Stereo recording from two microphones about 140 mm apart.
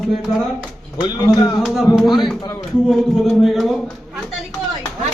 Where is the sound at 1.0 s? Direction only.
30° left (ahead or behind).